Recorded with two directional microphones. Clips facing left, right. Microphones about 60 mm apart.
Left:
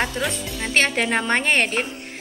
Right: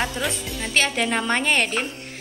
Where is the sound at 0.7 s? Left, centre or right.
Left.